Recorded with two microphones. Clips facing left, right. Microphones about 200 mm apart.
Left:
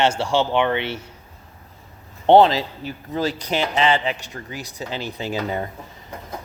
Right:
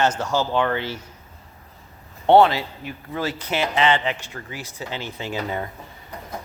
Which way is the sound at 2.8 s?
35° left (ahead or behind).